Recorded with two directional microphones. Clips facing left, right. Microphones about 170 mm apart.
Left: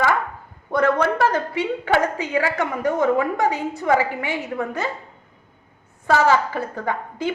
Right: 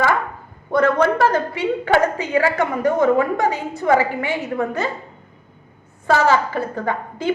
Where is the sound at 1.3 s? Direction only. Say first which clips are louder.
Right 3 dB; 20° left (ahead or behind).